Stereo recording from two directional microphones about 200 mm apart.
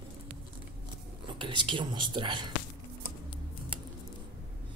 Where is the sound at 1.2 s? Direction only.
25° right (ahead or behind).